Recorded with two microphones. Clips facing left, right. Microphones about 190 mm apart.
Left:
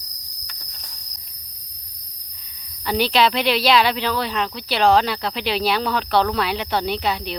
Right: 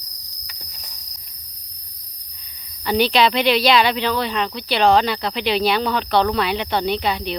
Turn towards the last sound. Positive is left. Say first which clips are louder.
# right 2 dB
turn(degrees=5)  # may be behind; listen again after turning